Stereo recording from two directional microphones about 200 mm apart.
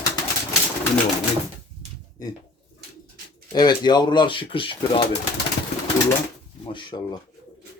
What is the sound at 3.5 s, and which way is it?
Speech, 20° left (ahead or behind).